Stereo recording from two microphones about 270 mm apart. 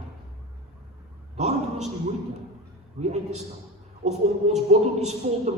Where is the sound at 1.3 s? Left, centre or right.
Right.